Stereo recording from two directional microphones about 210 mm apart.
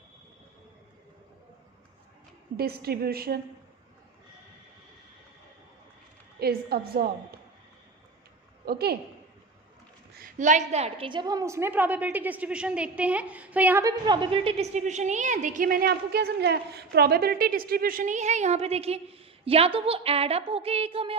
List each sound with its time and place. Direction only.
2.6 s a woman's voice: 45° right (ahead or behind)
6.4 s a woman's voice: 45° right (ahead or behind)
8.6 s a woman's voice: 50° right (ahead or behind)
10.2 s a woman's voice: 35° right (ahead or behind)